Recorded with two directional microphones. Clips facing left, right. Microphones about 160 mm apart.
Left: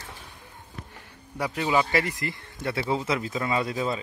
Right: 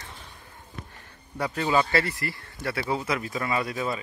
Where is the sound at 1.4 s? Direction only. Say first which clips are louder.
Even; 10° left (ahead or behind).